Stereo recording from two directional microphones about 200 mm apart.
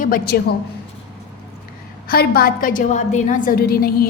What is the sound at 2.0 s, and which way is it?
A woman's voice, 50° left (ahead or behind).